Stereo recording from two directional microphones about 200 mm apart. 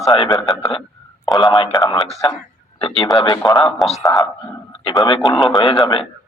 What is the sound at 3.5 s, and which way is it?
Speech, 25° left (ahead or behind).